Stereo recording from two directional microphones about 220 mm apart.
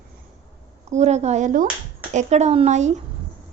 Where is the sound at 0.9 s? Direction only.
30° right (ahead or behind).